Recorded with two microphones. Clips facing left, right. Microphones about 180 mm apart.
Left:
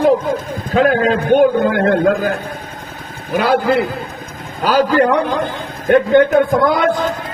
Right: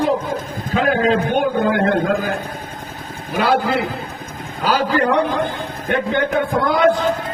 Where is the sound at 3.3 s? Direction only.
50° left (ahead or behind).